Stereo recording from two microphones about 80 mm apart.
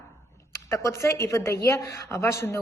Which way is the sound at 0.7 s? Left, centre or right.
Left.